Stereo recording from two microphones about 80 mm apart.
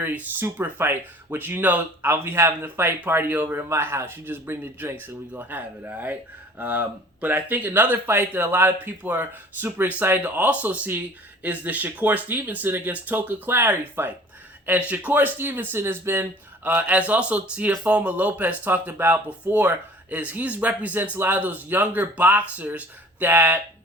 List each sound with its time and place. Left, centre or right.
0.0 s speech: right
3.7 s speech: right
16.6 s speech: centre